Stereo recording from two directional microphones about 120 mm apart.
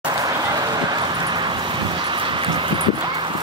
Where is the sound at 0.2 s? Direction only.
35° right (ahead or behind).